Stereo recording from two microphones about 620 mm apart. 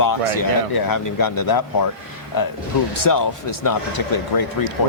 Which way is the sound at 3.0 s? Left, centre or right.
Left.